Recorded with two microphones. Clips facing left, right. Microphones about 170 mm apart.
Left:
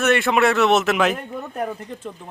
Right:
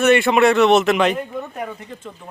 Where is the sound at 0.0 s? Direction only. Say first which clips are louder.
Right 4 dB; centre (ahead or behind).